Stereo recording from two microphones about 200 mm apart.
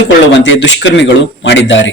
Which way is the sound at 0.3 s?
60° left (ahead or behind).